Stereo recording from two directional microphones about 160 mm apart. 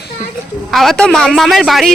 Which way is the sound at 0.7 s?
Centre (ahead or behind).